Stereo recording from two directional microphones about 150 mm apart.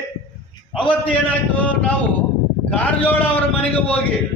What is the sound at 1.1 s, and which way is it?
A man's voice, 10° left (ahead or behind).